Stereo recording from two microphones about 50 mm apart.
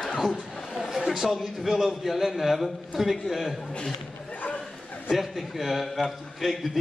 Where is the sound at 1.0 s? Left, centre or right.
Centre.